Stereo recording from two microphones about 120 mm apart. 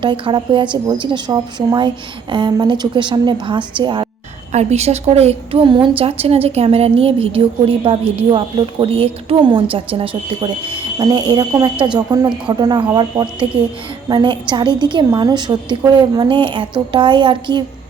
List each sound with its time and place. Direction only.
0.0 s a woman's voice: 40° right (ahead or behind)
4.5 s a woman's voice: 65° right (ahead or behind); by 17.6 s 40° right (ahead or behind)